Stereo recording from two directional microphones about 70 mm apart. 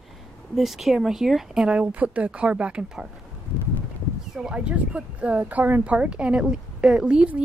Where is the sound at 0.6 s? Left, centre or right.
Centre.